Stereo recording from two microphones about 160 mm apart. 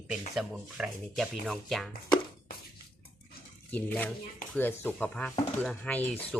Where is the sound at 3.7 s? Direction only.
10° left (ahead or behind).